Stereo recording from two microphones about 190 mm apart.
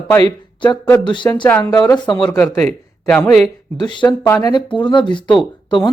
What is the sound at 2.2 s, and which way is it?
Speech, 5° left (ahead or behind).